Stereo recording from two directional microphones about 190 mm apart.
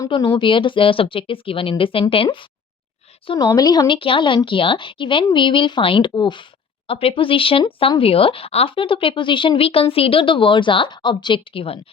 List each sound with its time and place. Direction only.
0.0 s speech: 20° left (ahead or behind)